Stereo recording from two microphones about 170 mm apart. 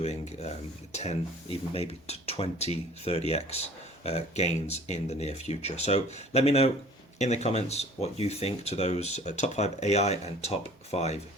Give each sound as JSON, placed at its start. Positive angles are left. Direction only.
{"t": 0.0, "sound": "speech", "side_deg": 40}